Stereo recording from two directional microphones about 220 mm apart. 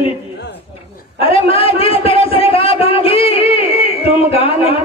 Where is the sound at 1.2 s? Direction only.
25° left (ahead or behind).